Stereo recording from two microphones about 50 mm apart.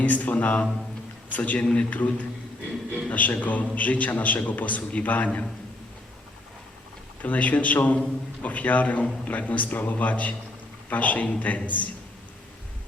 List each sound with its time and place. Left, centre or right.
0.0 s a man's voice: left
7.2 s a man's voice: left